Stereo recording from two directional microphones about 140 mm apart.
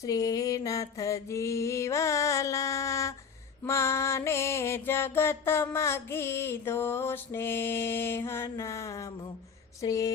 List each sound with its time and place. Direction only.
0.0 s mantra: 25° left (ahead or behind)
3.6 s music: 20° left (ahead or behind)
9.8 s a sound: 25° left (ahead or behind)